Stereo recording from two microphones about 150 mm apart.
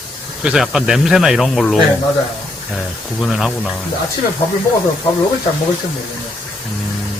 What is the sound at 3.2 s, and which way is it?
Speech, centre (ahead or behind).